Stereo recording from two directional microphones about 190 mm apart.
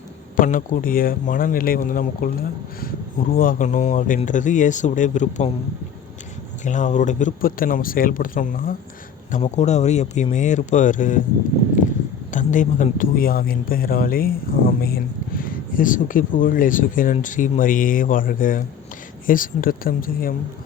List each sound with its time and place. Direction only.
0.3 s a man's voice: 45° left (ahead or behind)
6.7 s a man's voice: 40° left (ahead or behind)
12.3 s a man's voice: 40° left (ahead or behind)